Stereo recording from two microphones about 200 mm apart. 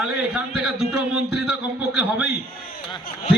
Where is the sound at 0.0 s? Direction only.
5° right (ahead or behind).